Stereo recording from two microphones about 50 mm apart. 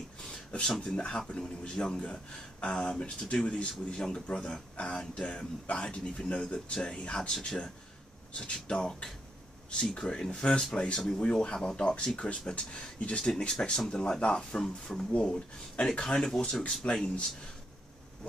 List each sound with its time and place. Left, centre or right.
0.5 s speech: centre